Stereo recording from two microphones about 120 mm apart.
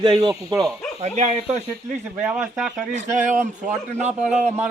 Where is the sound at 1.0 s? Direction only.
70° right (ahead or behind).